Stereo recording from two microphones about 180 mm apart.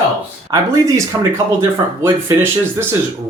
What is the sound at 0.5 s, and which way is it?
A man's voice, 20° right (ahead or behind).